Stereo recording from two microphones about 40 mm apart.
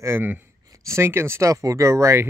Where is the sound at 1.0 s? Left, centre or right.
Right.